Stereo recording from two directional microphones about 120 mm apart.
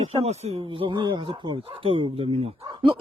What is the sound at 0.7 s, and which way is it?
Speech, 45° right (ahead or behind).